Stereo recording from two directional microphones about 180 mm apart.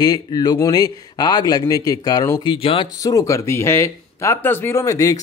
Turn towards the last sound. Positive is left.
turn(degrees=20)  # may be behind; listen again after turning